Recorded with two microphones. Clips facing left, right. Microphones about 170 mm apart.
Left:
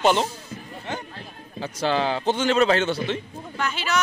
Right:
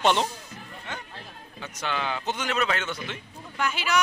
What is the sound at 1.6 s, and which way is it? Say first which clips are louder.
A man's voice: left 8 dB; 35° left (ahead or behind).